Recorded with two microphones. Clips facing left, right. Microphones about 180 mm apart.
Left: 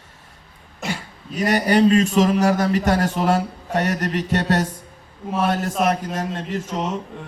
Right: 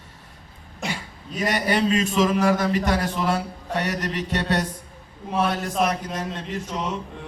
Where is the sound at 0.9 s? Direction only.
45° left (ahead or behind).